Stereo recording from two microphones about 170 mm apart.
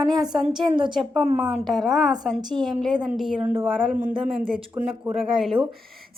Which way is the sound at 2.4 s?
25° right (ahead or behind).